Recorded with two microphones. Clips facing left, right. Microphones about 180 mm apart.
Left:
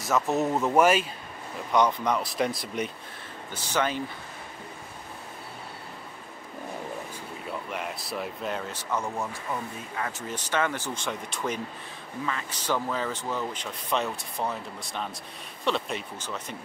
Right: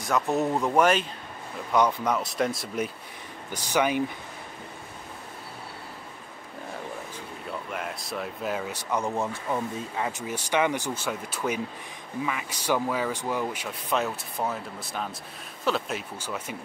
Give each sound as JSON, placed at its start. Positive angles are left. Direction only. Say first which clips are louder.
{"t": 0.0, "sound": "speech", "louder": "even", "side_deg": 0}
{"t": 1.7, "sound": "speech", "louder": "even", "side_deg": -5}
{"t": 3.5, "sound": "speech", "louder": "right 3 dB", "side_deg": -10}
{"t": 7.7, "sound": "speech", "louder": "right 1 dB", "side_deg": 0}
{"t": 8.9, "sound": "speech", "louder": "right 3 dB", "side_deg": -20}